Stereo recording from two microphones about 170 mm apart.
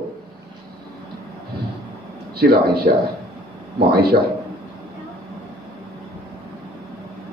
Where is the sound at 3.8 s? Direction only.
65° right (ahead or behind).